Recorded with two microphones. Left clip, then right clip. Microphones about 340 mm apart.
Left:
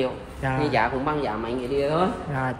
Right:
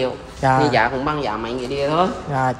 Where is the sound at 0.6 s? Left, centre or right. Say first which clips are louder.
Right 6 dB; right.